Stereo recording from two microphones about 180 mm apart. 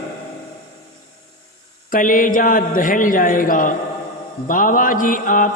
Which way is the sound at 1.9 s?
50° left (ahead or behind).